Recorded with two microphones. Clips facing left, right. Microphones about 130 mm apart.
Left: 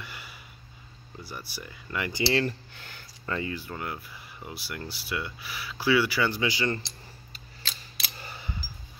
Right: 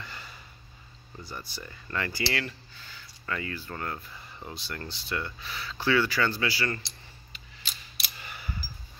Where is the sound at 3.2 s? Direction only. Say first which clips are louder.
Left 3 dB; 25° left (ahead or behind).